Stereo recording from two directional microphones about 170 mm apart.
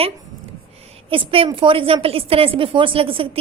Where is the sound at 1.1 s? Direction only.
30° right (ahead or behind).